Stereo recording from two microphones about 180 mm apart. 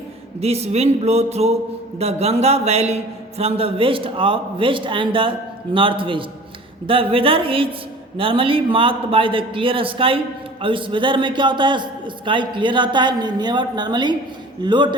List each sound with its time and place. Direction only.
0.3 s a man's voice: 35° right (ahead or behind)